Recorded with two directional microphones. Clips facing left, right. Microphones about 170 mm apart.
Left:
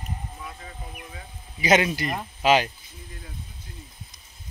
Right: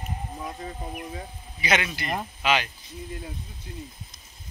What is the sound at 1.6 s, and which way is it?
Speech, 40° left (ahead or behind).